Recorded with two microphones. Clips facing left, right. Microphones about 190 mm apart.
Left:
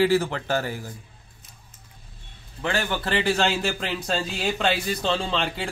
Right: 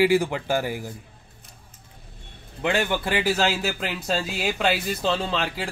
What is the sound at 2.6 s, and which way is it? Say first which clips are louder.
A man's voice: right 3 dB; 15° right (ahead or behind).